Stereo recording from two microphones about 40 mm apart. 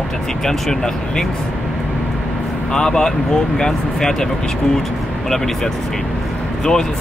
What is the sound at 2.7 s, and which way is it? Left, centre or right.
Speech, centre.